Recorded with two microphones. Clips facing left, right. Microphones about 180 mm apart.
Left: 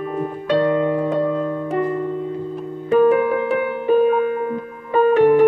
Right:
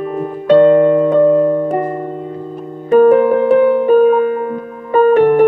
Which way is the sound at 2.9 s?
50° right (ahead or behind).